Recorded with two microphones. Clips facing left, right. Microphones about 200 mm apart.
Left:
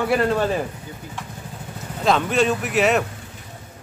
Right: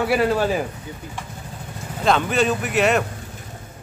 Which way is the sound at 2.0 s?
Centre (ahead or behind).